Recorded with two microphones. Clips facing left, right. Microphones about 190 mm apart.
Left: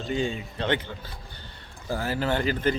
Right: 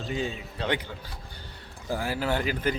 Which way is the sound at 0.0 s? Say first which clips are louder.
Left 3 dB; centre (ahead or behind).